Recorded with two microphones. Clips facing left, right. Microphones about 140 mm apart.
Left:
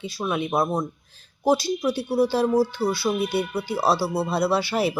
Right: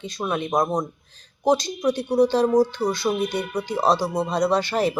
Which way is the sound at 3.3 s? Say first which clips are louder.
Left 2 dB; 5° left (ahead or behind).